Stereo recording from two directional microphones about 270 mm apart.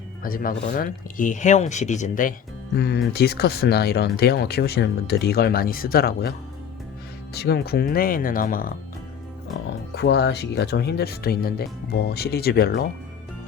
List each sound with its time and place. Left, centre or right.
0.2 s speech: left
7.3 s speech: left
9.9 s speech: left